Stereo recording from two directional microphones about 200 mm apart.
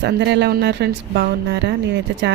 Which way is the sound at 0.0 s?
60° right (ahead or behind).